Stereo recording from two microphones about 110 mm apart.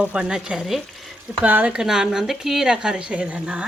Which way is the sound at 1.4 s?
15° right (ahead or behind).